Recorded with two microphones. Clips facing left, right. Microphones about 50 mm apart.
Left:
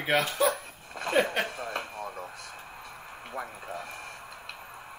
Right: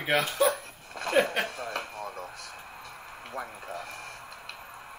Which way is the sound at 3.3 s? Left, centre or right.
Centre.